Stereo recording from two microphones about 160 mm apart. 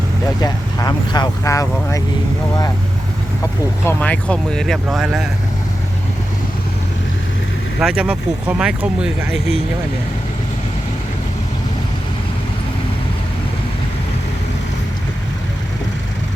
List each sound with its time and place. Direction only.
0.4 s speech: 25° left (ahead or behind)
3.8 s speech: 10° left (ahead or behind)
7.8 s speech: 5° right (ahead or behind)